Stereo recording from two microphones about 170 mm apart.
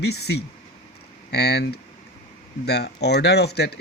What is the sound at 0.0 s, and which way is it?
Speech, 75° left (ahead or behind).